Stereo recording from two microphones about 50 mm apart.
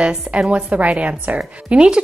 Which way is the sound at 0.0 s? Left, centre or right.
Right.